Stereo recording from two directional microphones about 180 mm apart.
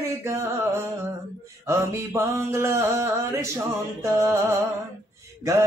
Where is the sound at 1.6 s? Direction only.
15° right (ahead or behind).